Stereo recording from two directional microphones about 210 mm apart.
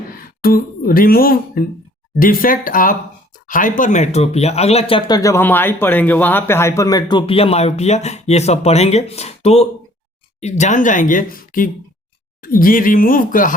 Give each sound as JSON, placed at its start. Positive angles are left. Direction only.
{"t": 0.2, "sound": "speech", "side_deg": 45}